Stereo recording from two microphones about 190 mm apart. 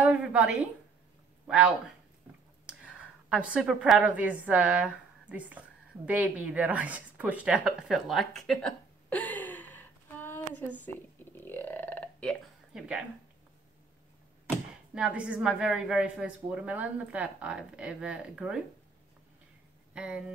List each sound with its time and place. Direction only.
0.0 s a woman's voice: 5° right (ahead or behind)
2.6 s a woman's voice: 5° right (ahead or behind); by 10.7 s 10° left (ahead or behind)
11.3 s burping: 10° left (ahead or behind)
15.0 s a woman's voice: 5° right (ahead or behind)
19.9 s speech: 5° right (ahead or behind)